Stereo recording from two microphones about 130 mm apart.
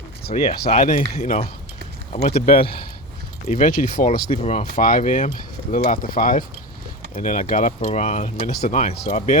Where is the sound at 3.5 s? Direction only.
90° left.